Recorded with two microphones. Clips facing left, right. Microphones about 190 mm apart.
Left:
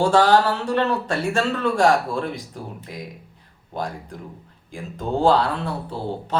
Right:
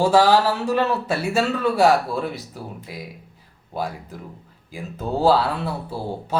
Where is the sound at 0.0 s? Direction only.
5° right (ahead or behind).